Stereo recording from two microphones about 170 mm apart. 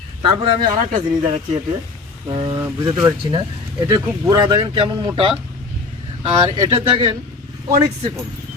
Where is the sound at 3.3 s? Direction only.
25° right (ahead or behind).